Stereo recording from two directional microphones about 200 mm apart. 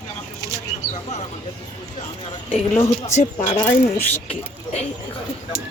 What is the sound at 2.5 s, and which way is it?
Speech, 35° left (ahead or behind).